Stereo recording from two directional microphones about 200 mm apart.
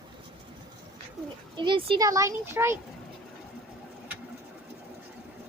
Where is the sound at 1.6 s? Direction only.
25° right (ahead or behind).